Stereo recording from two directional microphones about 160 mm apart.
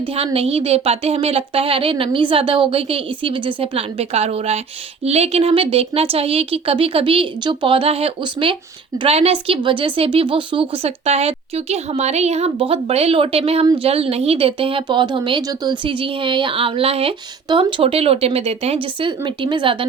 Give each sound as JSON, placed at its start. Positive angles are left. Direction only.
{"t": 0.0, "sound": "speech", "side_deg": -35}